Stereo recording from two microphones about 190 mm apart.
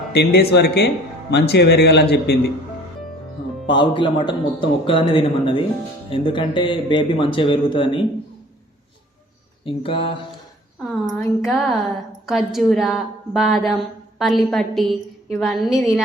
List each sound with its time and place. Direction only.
0.1 s speech: 60° left (ahead or behind)
3.7 s a man's voice: 25° left (ahead or behind)
9.6 s a man's voice: 30° left (ahead or behind)
11.2 s a woman's voice: centre (ahead or behind)